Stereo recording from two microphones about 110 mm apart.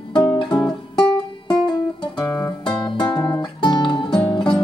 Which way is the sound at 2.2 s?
35° left (ahead or behind).